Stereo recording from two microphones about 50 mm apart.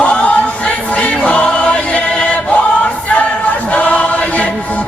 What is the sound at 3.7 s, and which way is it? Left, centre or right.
Choir, left.